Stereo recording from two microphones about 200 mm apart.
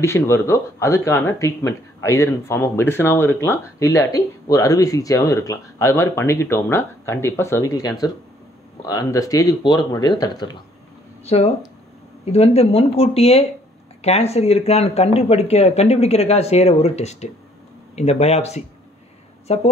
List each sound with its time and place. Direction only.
0.0 s a woman's voice: 15° left (ahead or behind); by 19.7 s 30° left (ahead or behind)